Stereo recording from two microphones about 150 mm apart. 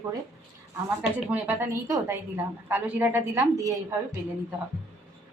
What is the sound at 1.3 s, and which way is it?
A woman's voice, 15° right (ahead or behind).